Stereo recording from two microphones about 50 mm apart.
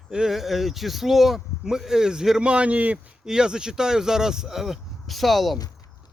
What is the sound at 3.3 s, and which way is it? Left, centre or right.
Speech, centre.